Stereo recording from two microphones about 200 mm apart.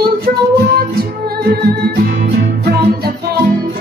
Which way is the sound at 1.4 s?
50° right (ahead or behind).